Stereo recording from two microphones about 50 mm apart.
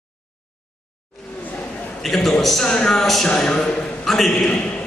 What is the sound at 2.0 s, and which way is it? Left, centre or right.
Speech, centre.